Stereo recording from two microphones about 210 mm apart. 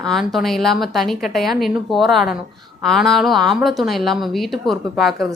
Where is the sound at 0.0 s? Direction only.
Centre (ahead or behind).